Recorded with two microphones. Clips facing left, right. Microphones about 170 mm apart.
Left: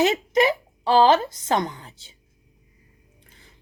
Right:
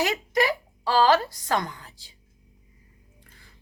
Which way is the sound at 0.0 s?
20° left (ahead or behind).